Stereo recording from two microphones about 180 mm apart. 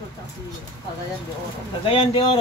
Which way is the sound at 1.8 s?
30° left (ahead or behind).